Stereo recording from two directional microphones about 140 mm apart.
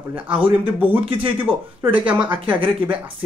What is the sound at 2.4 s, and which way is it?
Speech, 10° right (ahead or behind).